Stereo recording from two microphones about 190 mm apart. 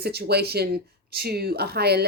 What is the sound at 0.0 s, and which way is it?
Speech, 60° right (ahead or behind).